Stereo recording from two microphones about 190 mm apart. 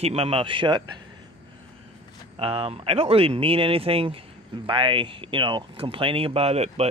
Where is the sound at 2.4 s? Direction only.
30° right (ahead or behind).